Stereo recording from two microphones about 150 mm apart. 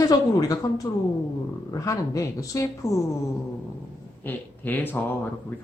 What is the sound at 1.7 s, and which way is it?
Speech, 20° left (ahead or behind).